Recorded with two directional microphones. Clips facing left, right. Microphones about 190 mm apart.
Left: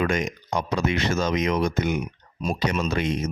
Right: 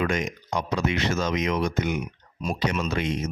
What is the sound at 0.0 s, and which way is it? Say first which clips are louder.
Speech: left 2 dB; 40° left (ahead or behind).